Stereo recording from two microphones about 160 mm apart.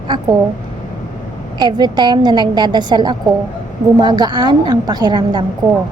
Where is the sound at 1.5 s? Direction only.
25° right (ahead or behind).